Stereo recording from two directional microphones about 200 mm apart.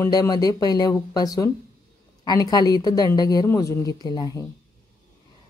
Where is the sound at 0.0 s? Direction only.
20° left (ahead or behind).